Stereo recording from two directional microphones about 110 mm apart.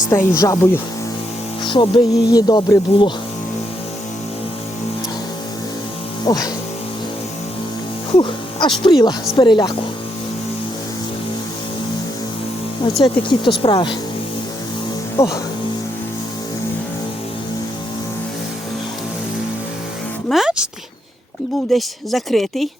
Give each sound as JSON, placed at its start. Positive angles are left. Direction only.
{"t": 0.1, "sound": "speech", "side_deg": 30}
{"t": 1.6, "sound": "speech", "side_deg": 50}
{"t": 6.2, "sound": "music", "side_deg": 35}
{"t": 8.2, "sound": "speech", "side_deg": 45}
{"t": 13.0, "sound": "speech", "side_deg": 45}
{"t": 15.2, "sound": "speech", "side_deg": 25}
{"t": 20.3, "sound": "music", "side_deg": -5}
{"t": 21.7, "sound": "speech", "side_deg": 0}